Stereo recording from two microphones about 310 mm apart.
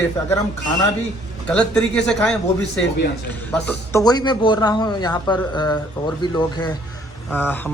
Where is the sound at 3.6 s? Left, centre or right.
Centre.